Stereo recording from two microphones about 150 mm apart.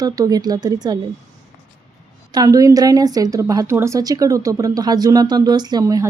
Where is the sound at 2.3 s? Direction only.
25° right (ahead or behind).